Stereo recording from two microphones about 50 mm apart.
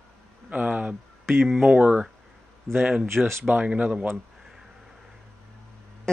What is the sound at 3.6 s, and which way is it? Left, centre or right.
Speech, right.